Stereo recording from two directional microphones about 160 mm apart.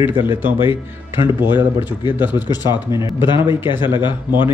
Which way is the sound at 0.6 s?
30° left (ahead or behind).